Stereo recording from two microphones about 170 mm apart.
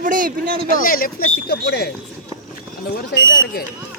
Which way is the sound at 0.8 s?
55° left (ahead or behind).